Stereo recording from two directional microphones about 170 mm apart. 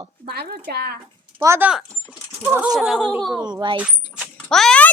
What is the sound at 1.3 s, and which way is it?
A child's voice, 15° right (ahead or behind).